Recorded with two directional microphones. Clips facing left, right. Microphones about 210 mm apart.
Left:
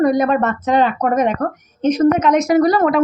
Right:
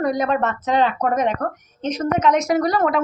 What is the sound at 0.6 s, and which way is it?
Speech, 50° left (ahead or behind).